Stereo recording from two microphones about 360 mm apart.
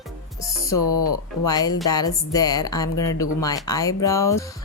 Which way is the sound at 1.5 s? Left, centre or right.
Centre.